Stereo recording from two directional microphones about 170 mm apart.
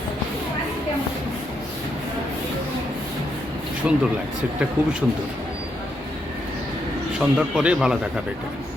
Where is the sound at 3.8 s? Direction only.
5° right (ahead or behind).